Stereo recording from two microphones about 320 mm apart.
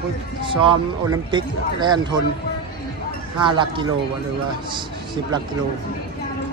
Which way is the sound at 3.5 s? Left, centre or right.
Centre.